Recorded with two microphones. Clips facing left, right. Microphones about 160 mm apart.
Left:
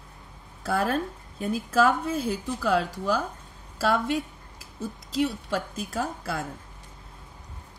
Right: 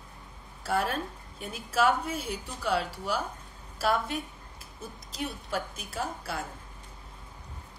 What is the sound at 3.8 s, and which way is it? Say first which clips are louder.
Speech: left 4 dB; 90° left.